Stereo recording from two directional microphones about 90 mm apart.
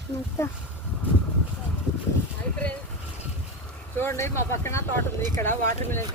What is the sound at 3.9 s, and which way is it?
Speech, 30° left (ahead or behind).